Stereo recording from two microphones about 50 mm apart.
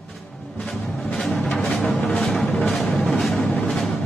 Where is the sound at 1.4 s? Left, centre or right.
Left.